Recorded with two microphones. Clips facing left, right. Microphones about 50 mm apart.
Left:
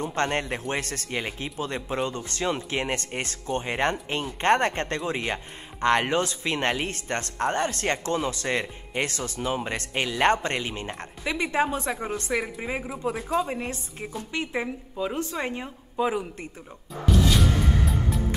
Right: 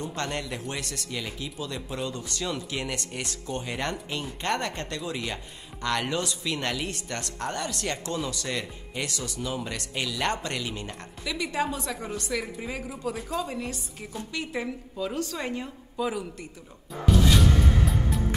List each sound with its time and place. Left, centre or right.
0.0 s a woman's voice: left
17.4 s music: centre